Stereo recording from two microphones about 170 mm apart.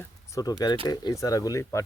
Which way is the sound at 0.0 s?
20° left (ahead or behind).